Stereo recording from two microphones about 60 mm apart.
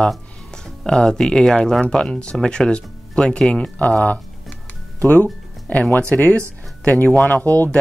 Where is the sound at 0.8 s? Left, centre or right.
Centre.